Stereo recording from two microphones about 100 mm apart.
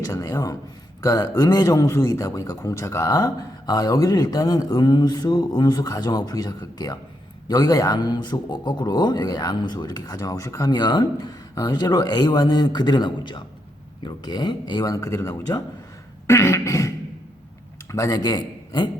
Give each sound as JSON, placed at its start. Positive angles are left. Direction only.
{"t": 0.0, "sound": "a man's voice", "side_deg": 30}
{"t": 16.2, "sound": "beatboxing", "side_deg": 25}
{"t": 17.9, "sound": "a man's voice", "side_deg": 35}